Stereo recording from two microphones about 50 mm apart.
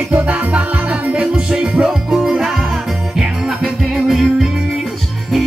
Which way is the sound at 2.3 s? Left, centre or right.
Centre.